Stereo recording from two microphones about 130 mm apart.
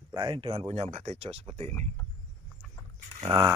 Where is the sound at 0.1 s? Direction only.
35° right (ahead or behind); by 1.8 s 55° right (ahead or behind).